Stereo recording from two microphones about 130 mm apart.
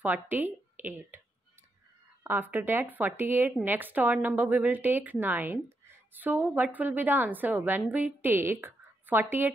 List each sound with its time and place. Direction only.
0.0 s speech: 15° right (ahead or behind)
2.2 s a woman's voice: 15° right (ahead or behind)